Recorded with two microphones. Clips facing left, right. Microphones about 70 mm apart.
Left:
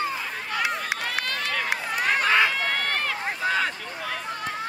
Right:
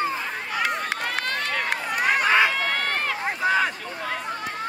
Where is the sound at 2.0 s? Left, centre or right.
Centre.